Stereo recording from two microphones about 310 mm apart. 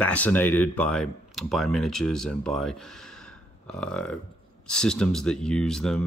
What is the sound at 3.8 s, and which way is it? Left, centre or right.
Speech, centre.